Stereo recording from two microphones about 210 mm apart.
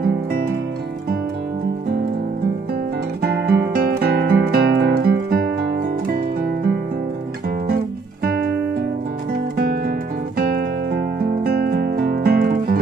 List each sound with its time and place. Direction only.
0.0 s music: 45° right (ahead or behind)
3.3 s guitar: 50° right (ahead or behind)
7.6 s music: 45° right (ahead or behind)
9.6 s music: 45° right (ahead or behind)